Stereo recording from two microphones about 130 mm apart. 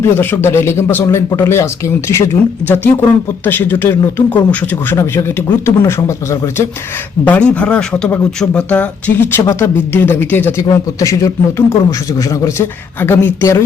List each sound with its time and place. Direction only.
0.0 s a man's voice: 15° left (ahead or behind)
7.3 s speech: 10° left (ahead or behind)
10.6 s a man's voice: 25° left (ahead or behind)